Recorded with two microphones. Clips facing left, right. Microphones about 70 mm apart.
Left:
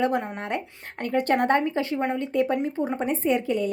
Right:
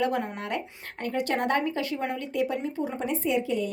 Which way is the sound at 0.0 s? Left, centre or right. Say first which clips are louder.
Left 2 dB; left.